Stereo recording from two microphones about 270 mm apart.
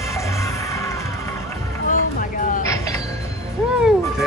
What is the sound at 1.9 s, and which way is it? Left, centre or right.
Music, left.